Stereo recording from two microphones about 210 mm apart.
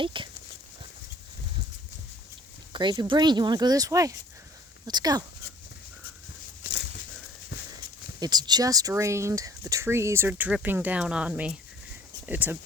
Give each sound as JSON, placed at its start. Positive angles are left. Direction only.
{"t": 0.0, "sound": "speech", "side_deg": -25}
{"t": 2.7, "sound": "speech", "side_deg": -20}
{"t": 8.2, "sound": "speech", "side_deg": -20}